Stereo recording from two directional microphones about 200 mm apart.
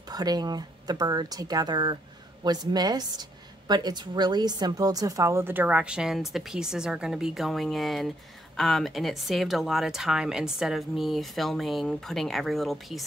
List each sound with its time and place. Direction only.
0.1 s a woman's voice: 20° right (ahead or behind); by 13.0 s centre (ahead or behind)